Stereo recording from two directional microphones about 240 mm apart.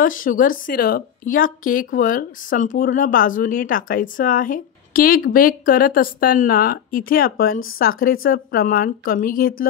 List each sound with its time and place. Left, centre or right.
0.0 s speech: left